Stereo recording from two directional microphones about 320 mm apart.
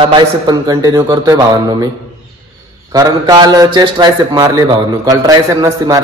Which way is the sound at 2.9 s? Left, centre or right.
Centre.